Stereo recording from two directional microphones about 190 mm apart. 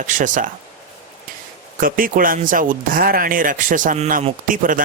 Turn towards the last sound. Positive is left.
turn(degrees=-45)  # may be behind; listen again after turning